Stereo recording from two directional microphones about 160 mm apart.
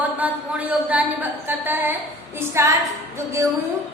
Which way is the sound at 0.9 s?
10° right (ahead or behind).